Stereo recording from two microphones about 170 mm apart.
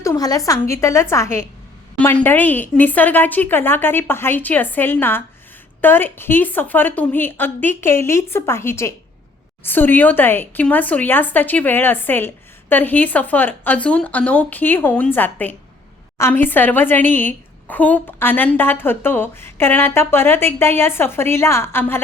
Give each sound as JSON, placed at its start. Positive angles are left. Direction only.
{"t": 0.0, "sound": "speech", "side_deg": 20}